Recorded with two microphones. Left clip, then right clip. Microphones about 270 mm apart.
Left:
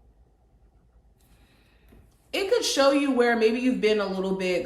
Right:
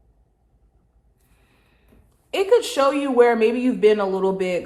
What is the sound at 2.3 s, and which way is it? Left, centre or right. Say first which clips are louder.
Speech: right 5 dB; centre.